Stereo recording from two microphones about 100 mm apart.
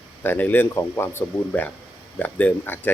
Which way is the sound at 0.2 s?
20° left (ahead or behind).